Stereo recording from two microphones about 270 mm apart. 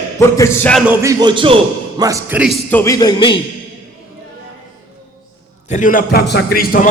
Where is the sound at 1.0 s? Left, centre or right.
Centre.